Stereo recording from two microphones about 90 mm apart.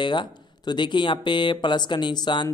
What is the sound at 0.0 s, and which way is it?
A man's voice, 60° left (ahead or behind).